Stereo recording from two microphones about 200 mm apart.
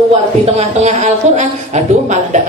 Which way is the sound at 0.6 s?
35° right (ahead or behind).